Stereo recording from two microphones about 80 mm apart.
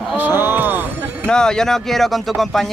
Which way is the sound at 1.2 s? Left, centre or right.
Centre.